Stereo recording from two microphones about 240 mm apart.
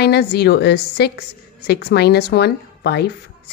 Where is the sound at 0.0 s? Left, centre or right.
Left.